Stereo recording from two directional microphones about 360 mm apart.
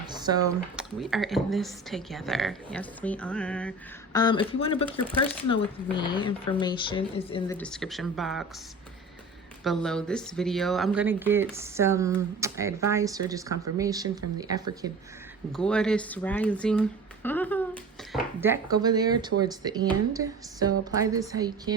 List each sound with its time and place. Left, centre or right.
0.1 s speech: centre
9.6 s speech: centre
15.5 s speech: centre
18.1 s speech: centre